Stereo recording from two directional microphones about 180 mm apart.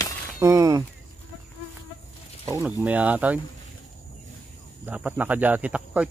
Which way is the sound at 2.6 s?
10° right (ahead or behind).